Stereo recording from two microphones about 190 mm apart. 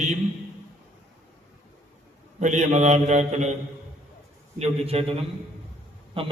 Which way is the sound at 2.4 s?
40° right (ahead or behind).